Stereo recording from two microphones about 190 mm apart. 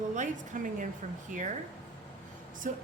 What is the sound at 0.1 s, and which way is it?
Speech, 40° right (ahead or behind).